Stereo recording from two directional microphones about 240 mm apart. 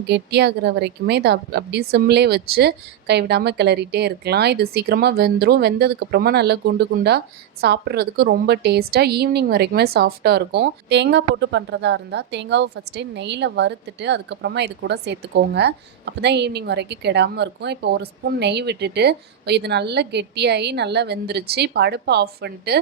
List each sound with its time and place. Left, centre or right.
0.1 s a woman's voice: right